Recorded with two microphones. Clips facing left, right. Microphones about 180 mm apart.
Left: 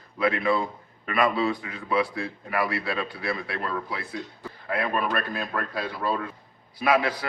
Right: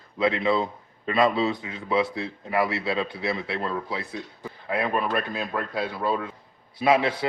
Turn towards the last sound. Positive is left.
turn(degrees=-25)  # may be behind; listen again after turning